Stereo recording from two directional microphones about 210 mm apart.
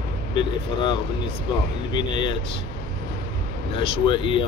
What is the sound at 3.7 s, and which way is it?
Speech, 25° left (ahead or behind).